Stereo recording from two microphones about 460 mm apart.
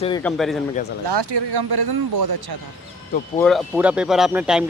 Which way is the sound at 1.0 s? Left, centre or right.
Right.